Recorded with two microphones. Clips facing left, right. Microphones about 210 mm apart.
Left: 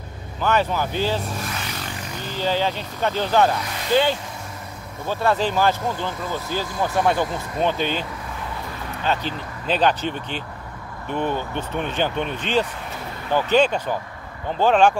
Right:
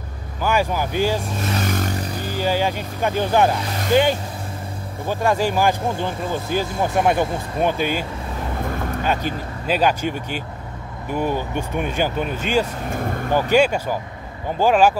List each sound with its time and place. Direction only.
0.4 s speech: 10° right (ahead or behind)
1.6 s a sound: 45° right (ahead or behind)
2.3 s speech: 10° right (ahead or behind)
7.6 s speech: 10° right (ahead or behind)
8.5 s vehicle: 50° right (ahead or behind)
9.0 s speech: 10° right (ahead or behind)
12.9 s vehicle: 50° right (ahead or behind)
13.5 s speech: 10° right (ahead or behind)